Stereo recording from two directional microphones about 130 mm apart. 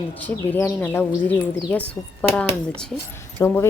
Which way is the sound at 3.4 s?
20° left (ahead or behind).